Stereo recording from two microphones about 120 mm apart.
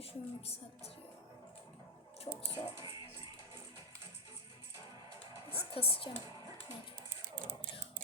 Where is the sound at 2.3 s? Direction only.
55° left (ahead or behind).